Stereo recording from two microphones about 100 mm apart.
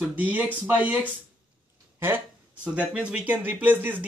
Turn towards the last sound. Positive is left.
turn(degrees=-20)  # may be behind; listen again after turning